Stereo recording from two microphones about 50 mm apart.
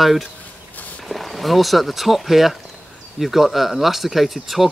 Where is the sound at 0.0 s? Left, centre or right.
Centre.